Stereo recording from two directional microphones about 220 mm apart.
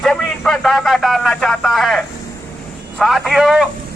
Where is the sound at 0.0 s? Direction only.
Centre (ahead or behind).